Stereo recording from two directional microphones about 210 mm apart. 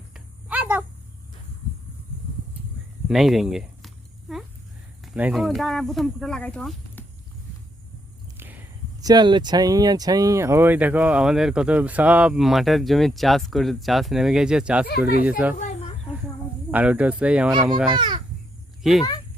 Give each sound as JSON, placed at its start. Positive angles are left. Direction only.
{"t": 0.1, "sound": "a sound", "side_deg": -5}
{"t": 3.1, "sound": "a sound", "side_deg": 0}
{"t": 5.0, "sound": "speech", "side_deg": -5}
{"t": 8.4, "sound": "speech", "side_deg": -10}
{"t": 14.8, "sound": "speech", "side_deg": 50}
{"t": 15.5, "sound": "a sound", "side_deg": 35}
{"t": 16.7, "sound": "speech", "side_deg": -5}
{"t": 17.9, "sound": "speech", "side_deg": -20}
{"t": 18.8, "sound": "speech", "side_deg": 0}